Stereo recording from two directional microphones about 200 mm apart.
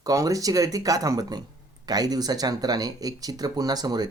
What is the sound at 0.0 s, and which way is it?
Speech, 15° right (ahead or behind).